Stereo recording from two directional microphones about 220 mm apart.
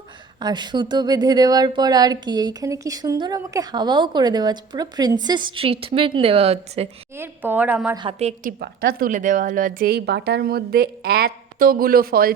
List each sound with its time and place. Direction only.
0.3 s speech: 20° right (ahead or behind)
7.2 s speech: 10° right (ahead or behind)
7.9 s speech: 25° right (ahead or behind)
8.4 s a woman's voice: 45° right (ahead or behind)